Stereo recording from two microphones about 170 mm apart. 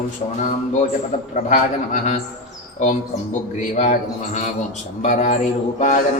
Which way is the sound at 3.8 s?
45° left (ahead or behind).